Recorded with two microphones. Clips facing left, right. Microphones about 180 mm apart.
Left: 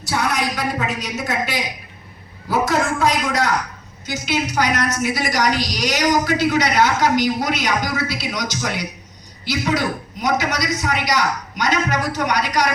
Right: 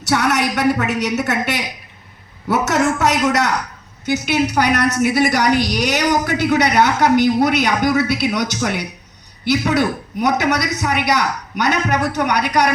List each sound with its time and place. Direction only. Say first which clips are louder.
0.1 s a woman's voice: right 4 dB; 75° right (ahead or behind)